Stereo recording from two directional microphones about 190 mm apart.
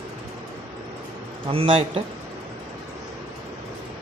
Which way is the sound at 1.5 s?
30° right (ahead or behind).